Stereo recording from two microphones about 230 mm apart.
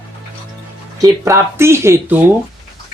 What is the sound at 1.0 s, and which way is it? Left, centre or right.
Speech, centre.